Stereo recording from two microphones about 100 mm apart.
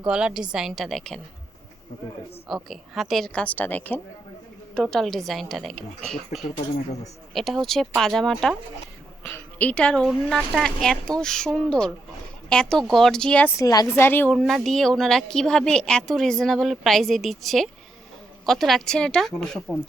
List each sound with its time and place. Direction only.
0.0 s a woman's voice: 10° right (ahead or behind)
2.5 s a woman's voice: centre (ahead or behind); by 4.0 s 20° left (ahead or behind)
4.7 s speech: 5° left (ahead or behind)
9.3 s a woman's voice: 15° left (ahead or behind)
13.6 s a woman's voice: 40° left (ahead or behind)
13.9 s a woman's voice: 20° left (ahead or behind)
14.3 s speech: 5° left (ahead or behind)